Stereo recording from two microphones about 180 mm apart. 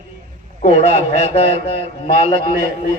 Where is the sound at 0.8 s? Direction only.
35° left (ahead or behind).